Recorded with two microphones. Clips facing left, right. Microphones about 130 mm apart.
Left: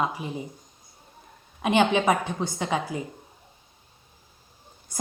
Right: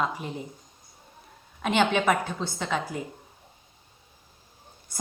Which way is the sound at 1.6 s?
15° left (ahead or behind).